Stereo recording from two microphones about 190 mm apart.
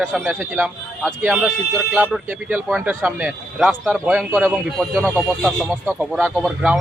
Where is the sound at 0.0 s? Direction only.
Centre (ahead or behind).